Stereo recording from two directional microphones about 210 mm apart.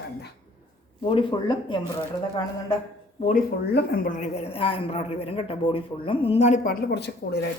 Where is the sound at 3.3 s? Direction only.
45° left (ahead or behind).